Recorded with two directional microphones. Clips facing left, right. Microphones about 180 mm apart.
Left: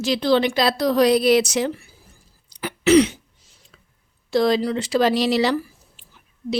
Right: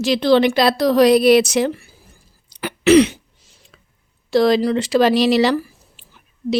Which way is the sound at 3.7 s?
65° right (ahead or behind).